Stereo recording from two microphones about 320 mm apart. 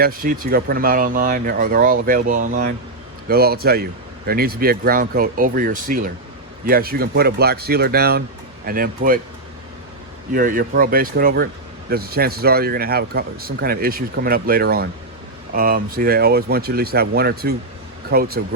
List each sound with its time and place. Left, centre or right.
0.0 s speech: right
10.3 s speech: right